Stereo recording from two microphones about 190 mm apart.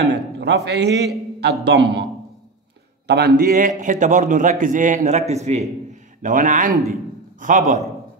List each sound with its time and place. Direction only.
0.0 s a sound: 65° right (ahead or behind)
0.7 s a man's voice: 65° right (ahead or behind)
3.1 s a man's voice: 55° right (ahead or behind)